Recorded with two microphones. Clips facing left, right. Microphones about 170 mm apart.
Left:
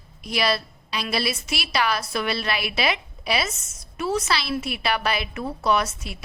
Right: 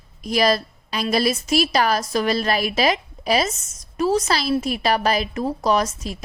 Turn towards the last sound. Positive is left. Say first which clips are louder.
# right 3 dB
turn(degrees=-40)  # may be behind; listen again after turning